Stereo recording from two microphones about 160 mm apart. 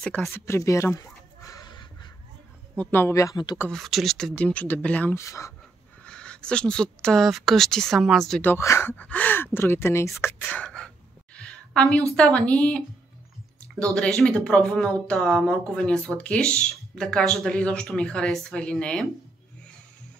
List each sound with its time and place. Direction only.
0.0 s speech: 5° left (ahead or behind)
0.3 s a sound: 15° left (ahead or behind)
2.8 s speech: 15° left (ahead or behind)
3.7 s speech: centre (ahead or behind); by 5.5 s 20° left (ahead or behind)
6.0 s speech: 5° left (ahead or behind)
11.3 s a sound: 5° left (ahead or behind)
12.2 s speech: 5° left (ahead or behind)